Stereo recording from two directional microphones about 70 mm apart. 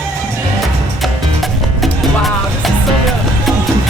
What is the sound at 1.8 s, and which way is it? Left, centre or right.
Music, centre.